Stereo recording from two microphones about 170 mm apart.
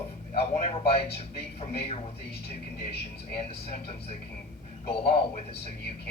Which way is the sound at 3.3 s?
35° left (ahead or behind).